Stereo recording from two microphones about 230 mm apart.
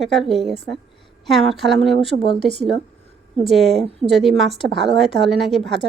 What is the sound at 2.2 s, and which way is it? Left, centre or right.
Speech, left.